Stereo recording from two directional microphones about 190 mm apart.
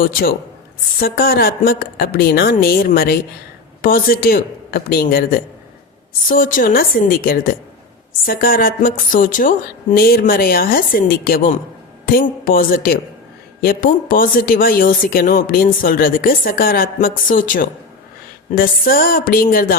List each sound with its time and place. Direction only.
0.0 s speech: 50° left (ahead or behind)